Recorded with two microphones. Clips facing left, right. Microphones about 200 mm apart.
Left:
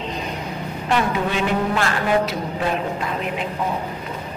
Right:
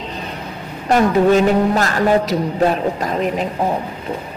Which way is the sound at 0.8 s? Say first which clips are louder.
Right 9 dB; 40° right (ahead or behind).